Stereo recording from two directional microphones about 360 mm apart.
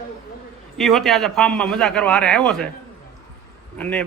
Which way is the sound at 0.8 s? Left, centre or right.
Centre.